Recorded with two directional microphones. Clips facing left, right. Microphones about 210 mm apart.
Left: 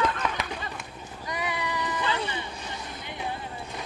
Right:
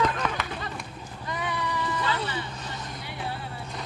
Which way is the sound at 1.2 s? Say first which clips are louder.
Even; 15° left (ahead or behind).